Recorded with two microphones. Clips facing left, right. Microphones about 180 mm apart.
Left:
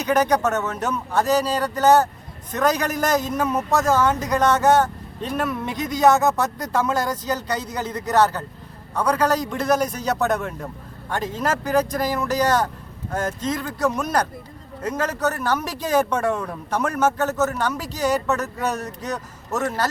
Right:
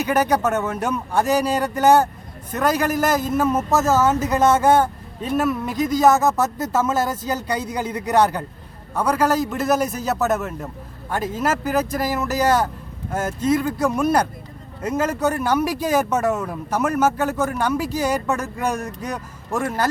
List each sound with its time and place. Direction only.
0.0 s a man's voice: 10° right (ahead or behind)